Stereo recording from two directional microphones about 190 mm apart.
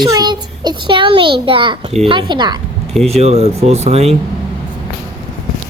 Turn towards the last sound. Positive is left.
turn(degrees=-35)  # may be behind; listen again after turning